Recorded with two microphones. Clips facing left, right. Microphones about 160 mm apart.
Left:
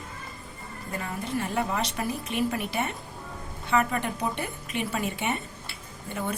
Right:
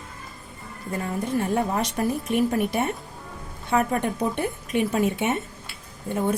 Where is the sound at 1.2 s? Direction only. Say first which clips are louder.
Right 5 dB; 50° right (ahead or behind).